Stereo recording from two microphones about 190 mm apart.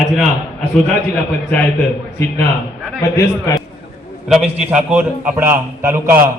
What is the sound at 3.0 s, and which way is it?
Speech, 15° left (ahead or behind).